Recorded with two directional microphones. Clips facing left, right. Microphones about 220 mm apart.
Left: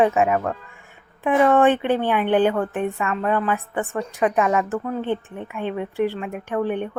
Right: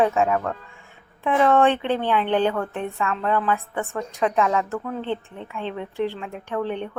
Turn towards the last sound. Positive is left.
turn(degrees=15)  # may be behind; listen again after turning